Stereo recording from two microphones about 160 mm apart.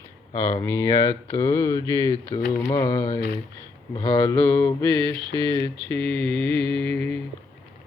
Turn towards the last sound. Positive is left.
turn(degrees=10)  # may be behind; listen again after turning